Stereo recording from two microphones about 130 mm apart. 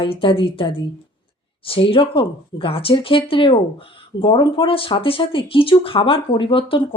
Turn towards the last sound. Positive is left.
turn(degrees=45)  # may be behind; listen again after turning